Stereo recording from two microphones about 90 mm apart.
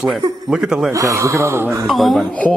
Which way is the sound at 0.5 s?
10° right (ahead or behind).